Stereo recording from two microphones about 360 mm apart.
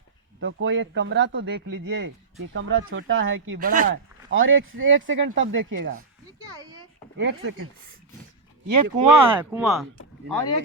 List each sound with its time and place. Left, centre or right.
0.3 s speech: right
6.6 s a sound: centre
7.2 s speech: right
8.8 s speech: right
9.2 s speech: centre